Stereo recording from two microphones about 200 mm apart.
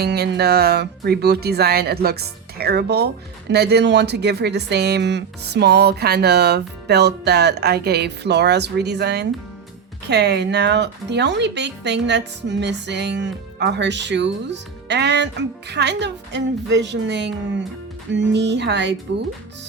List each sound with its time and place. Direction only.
0.0 s speech: 55° right (ahead or behind)